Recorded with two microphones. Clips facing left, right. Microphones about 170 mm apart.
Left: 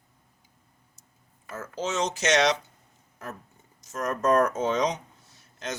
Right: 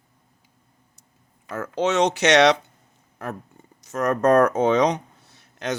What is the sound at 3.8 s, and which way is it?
Speech, 65° right (ahead or behind).